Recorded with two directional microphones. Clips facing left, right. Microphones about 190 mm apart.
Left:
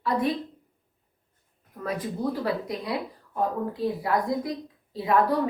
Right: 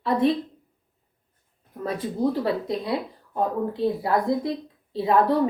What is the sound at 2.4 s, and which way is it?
A woman's voice, 25° right (ahead or behind).